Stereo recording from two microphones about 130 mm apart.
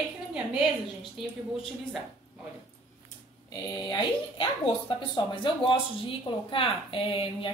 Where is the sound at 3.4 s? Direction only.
35° left (ahead or behind).